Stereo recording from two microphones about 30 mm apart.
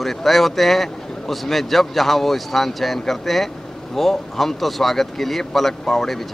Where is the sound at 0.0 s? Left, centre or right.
Centre.